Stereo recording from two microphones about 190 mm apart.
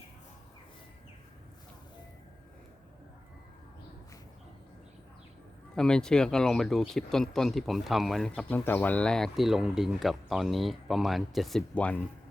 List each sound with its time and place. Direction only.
5.7 s speech: 5° left (ahead or behind)